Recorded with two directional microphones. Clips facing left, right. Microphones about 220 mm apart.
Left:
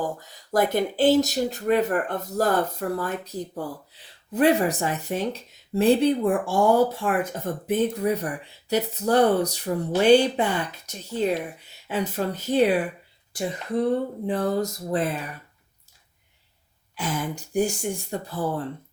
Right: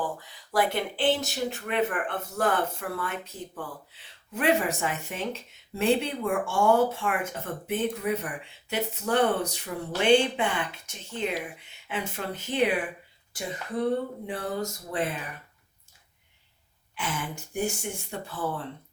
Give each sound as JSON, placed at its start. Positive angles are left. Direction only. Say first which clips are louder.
{"t": 0.0, "sound": "speech", "louder": "left 3 dB", "side_deg": 45}
{"t": 16.9, "sound": "speech", "louder": "left 5 dB", "side_deg": 40}